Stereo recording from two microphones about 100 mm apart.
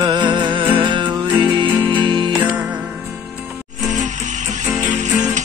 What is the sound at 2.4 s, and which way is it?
Music, 15° right (ahead or behind).